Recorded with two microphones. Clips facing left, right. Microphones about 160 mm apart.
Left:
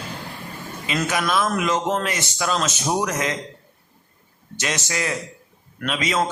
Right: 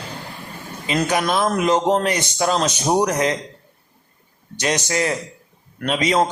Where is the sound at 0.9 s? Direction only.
35° right (ahead or behind).